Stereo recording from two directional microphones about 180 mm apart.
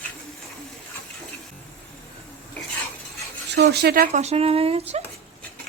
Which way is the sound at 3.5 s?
65° right (ahead or behind).